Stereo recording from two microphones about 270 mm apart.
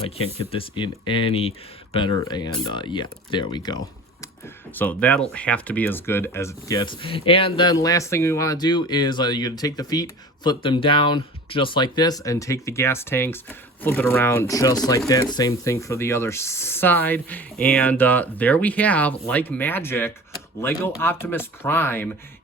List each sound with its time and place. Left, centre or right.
0.5 s speech: centre
4.7 s speech: centre